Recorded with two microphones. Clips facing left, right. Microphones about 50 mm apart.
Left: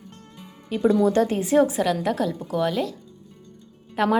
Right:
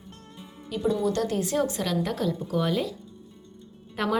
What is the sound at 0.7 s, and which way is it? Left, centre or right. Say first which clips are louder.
Speech: left 7 dB; left.